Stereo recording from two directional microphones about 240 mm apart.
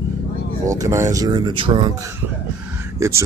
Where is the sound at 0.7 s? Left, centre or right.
Centre.